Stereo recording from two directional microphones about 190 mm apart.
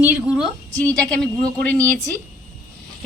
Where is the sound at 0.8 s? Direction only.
5° left (ahead or behind).